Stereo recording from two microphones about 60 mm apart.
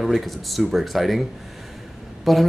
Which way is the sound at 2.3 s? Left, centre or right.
Centre.